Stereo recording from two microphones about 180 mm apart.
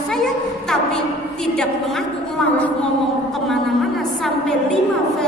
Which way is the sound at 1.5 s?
5° left (ahead or behind).